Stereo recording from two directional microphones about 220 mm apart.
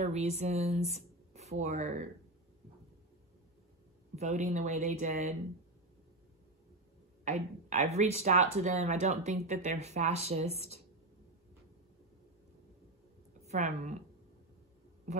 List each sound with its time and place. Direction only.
0.0 s speech: 30° right (ahead or behind)
4.1 s speech: 30° right (ahead or behind)
7.2 s speech: 30° right (ahead or behind)
13.5 s speech: 35° right (ahead or behind)
15.1 s speech: 35° right (ahead or behind)